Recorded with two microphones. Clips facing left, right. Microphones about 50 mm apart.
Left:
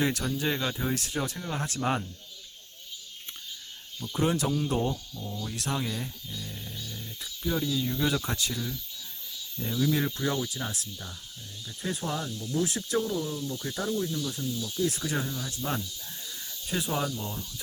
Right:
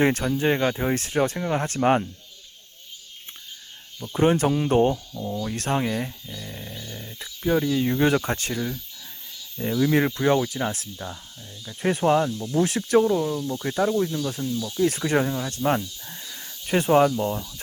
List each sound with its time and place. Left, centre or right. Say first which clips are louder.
0.0 s speech: right 7 dB; right
4.1 s speech: right 7 dB; right
11.8 s speech: right 12 dB; right